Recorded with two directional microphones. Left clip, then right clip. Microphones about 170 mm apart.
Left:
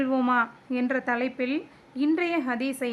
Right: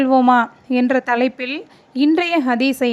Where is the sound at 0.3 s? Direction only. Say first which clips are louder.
Right 10 dB; 35° right (ahead or behind).